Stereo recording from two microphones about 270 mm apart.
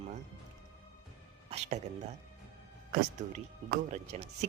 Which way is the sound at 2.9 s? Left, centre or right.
Right.